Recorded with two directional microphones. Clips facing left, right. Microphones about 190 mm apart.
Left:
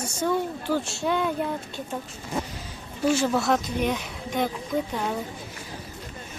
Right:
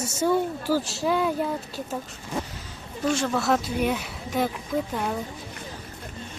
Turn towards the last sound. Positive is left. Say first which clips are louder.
# even
turn(degrees=0)  # may be behind; listen again after turning